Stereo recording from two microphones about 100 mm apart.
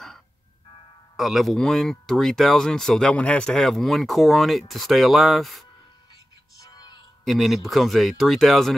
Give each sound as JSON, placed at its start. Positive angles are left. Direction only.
{"t": 1.1, "sound": "speech", "side_deg": 0}
{"t": 6.6, "sound": "music", "side_deg": 45}
{"t": 7.2, "sound": "speech", "side_deg": 0}